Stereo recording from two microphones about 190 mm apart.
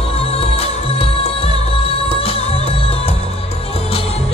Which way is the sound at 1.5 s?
30° left (ahead or behind).